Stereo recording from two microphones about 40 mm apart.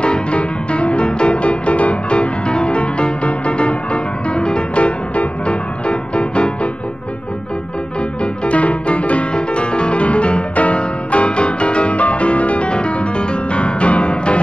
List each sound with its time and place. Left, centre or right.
0.0 s music: left
8.2 s music: left